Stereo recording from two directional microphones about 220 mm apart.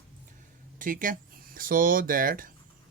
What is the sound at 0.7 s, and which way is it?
Speech, 40° right (ahead or behind).